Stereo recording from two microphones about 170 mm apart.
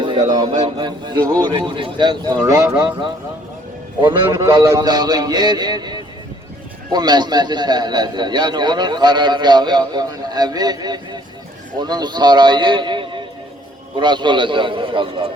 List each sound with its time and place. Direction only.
0.0 s a man's voice: 25° right (ahead or behind)